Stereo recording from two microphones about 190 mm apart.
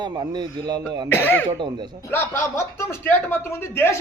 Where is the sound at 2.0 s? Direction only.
15° left (ahead or behind).